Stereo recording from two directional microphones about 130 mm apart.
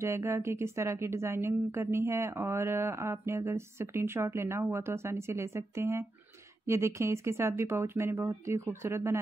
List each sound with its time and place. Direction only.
0.0 s a woman's voice: 20° right (ahead or behind)